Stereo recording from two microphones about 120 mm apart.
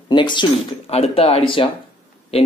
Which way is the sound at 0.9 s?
55° left (ahead or behind).